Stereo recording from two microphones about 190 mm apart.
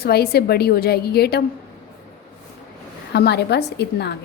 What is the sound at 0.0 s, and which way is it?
A woman's voice, 55° left (ahead or behind).